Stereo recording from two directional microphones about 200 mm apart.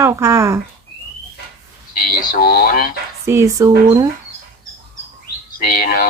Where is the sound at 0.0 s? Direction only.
15° right (ahead or behind).